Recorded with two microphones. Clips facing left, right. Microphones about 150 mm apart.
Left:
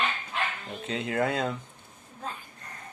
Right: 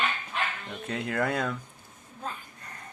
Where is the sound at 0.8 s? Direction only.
20° left (ahead or behind).